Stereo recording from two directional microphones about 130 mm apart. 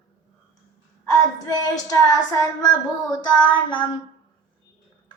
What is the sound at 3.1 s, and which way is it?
Child singing, 30° left (ahead or behind).